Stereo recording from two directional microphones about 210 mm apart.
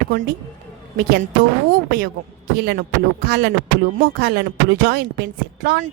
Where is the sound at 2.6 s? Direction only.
50° right (ahead or behind).